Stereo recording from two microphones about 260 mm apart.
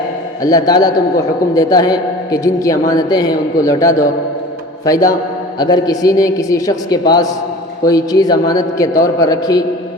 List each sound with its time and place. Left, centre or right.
0.4 s a man's voice: centre